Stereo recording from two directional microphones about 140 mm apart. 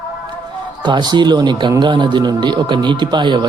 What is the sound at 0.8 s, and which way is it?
A man's voice, 35° right (ahead or behind).